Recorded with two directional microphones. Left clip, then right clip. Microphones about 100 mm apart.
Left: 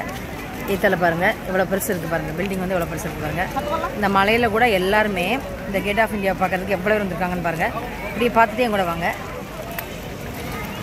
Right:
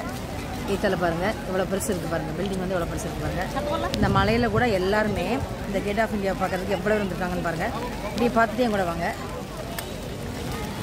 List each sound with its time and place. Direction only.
0.8 s speech: 20° left (ahead or behind)
4.0 s speech: 20° left (ahead or behind)